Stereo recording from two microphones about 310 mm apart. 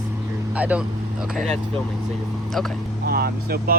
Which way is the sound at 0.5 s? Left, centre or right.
Centre.